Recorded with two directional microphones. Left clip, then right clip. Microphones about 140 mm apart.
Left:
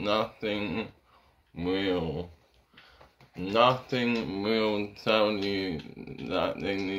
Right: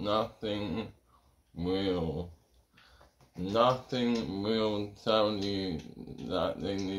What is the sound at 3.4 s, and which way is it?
Speech, 5° left (ahead or behind).